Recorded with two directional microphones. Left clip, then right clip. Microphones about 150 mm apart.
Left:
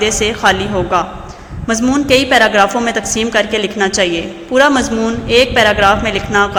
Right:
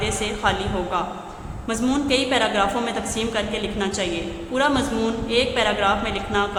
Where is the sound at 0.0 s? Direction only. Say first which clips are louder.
Left 10 dB; 35° left (ahead or behind).